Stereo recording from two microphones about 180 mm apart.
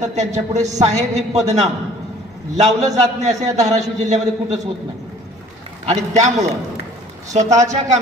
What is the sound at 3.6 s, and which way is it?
Speech, 40° right (ahead or behind).